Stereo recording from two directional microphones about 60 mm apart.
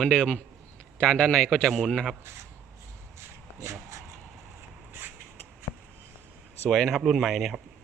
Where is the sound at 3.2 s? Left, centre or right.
Right.